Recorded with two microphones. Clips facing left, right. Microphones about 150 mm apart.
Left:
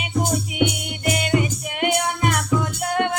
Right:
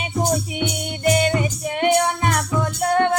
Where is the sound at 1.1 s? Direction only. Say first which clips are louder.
Left 2 dB; 35° right (ahead or behind).